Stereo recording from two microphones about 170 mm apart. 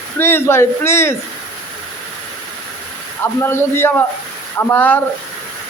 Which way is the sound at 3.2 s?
15° left (ahead or behind).